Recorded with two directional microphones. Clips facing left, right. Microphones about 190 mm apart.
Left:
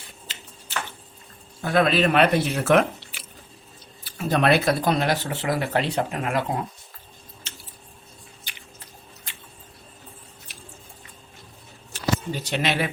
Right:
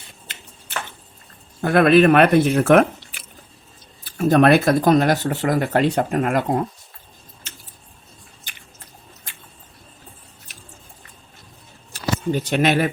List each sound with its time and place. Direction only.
1.6 s speech: 55° right (ahead or behind)
11.9 s speech: 50° right (ahead or behind)